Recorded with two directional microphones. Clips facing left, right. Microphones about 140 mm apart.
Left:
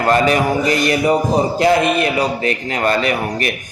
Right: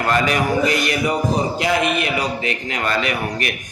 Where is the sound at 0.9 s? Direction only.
35° left (ahead or behind).